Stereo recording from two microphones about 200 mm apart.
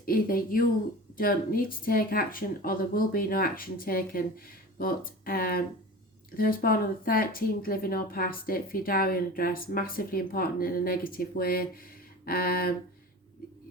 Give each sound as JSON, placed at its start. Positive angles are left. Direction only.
{"t": 0.0, "sound": "speech", "side_deg": 45}